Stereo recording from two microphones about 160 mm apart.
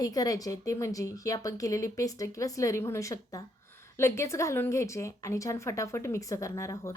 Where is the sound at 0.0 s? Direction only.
25° left (ahead or behind).